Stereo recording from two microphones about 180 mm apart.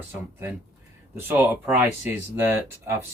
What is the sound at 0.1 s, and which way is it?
Speech, 10° right (ahead or behind).